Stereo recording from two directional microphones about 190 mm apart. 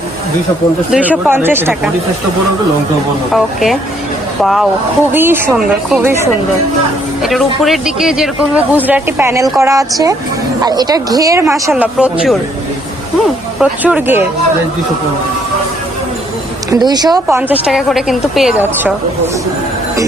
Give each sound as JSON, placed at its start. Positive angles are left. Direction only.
{"t": 0.9, "sound": "a woman's voice", "side_deg": -5}
{"t": 3.3, "sound": "a woman's voice", "side_deg": 0}
{"t": 5.1, "sound": "a woman's voice", "side_deg": -10}
{"t": 13.6, "sound": "speech", "side_deg": -5}
{"t": 16.6, "sound": "a woman's voice", "side_deg": -20}
{"t": 17.7, "sound": "a woman's voice", "side_deg": 0}